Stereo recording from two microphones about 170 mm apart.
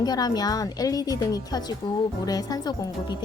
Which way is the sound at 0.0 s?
25° left (ahead or behind).